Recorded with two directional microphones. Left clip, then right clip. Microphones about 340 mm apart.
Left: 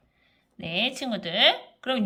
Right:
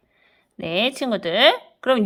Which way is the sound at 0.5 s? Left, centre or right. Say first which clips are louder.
Right 5 dB; centre.